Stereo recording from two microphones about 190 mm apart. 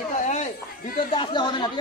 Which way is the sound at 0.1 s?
40° left (ahead or behind).